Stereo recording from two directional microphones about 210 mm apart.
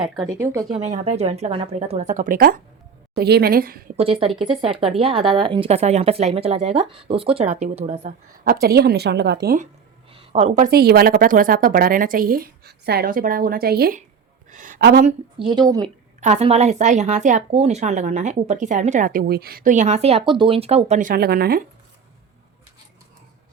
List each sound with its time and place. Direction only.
0.0 s speech: 10° right (ahead or behind)
0.8 s a woman's voice: 30° right (ahead or behind)
3.9 s a woman's voice: 25° right (ahead or behind)
8.6 s a woman's voice: 50° right (ahead or behind)
10.1 s a sound: 25° right (ahead or behind)
10.6 s a woman's voice: 45° right (ahead or behind)
14.5 s a sound: 40° right (ahead or behind)
15.0 s a woman's voice: 25° right (ahead or behind); by 21.6 s 45° right (ahead or behind)